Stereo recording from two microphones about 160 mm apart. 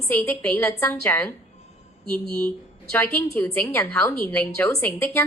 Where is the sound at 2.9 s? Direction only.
10° left (ahead or behind).